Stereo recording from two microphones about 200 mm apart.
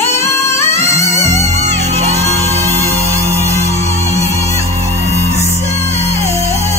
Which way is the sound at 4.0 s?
35° right (ahead or behind).